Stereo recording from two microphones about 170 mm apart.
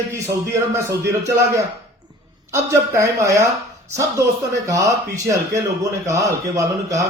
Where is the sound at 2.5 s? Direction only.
15° right (ahead or behind).